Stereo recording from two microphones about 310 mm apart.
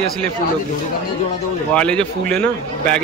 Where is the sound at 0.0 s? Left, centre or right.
Centre.